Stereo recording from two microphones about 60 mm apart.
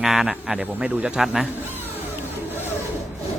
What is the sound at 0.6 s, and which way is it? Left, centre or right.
Speech, right.